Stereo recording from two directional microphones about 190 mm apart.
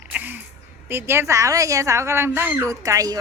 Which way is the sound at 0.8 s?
10° right (ahead or behind).